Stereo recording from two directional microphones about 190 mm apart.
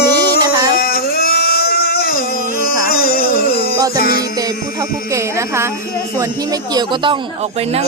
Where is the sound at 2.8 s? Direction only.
50° left (ahead or behind).